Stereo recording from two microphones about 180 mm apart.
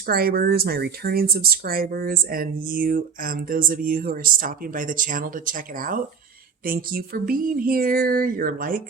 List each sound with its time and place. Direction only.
0.0 s speech: 55° right (ahead or behind)